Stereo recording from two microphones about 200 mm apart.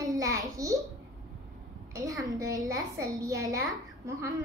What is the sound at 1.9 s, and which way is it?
A child's voice, 15° right (ahead or behind).